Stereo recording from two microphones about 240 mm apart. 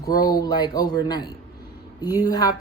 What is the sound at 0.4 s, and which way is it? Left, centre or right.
A woman's voice, centre.